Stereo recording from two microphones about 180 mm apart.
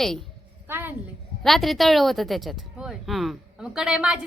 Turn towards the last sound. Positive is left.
turn(degrees=-5)  # may be behind; listen again after turning